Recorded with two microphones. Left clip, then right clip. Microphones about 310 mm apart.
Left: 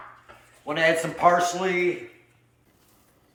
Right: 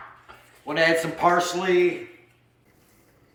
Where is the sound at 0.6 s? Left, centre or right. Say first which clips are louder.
Right 1 dB; centre.